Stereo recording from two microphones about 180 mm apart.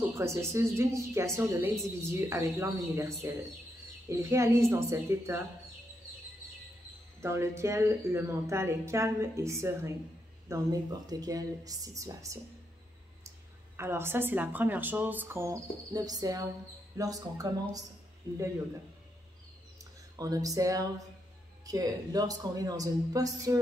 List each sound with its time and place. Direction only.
0.2 s a woman's voice: 15° right (ahead or behind)
7.2 s a woman's voice: 15° right (ahead or behind)
13.7 s a woman's voice: 15° right (ahead or behind)
19.8 s speech: 20° right (ahead or behind)